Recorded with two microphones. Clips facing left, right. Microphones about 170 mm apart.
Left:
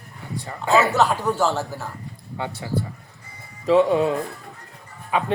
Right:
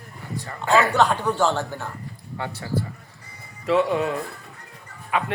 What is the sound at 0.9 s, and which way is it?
Speech, 5° left (ahead or behind).